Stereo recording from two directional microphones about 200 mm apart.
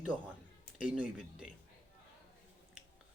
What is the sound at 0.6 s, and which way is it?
Speech, 5° right (ahead or behind).